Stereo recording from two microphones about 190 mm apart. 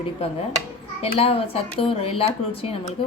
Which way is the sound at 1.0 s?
30° left (ahead or behind).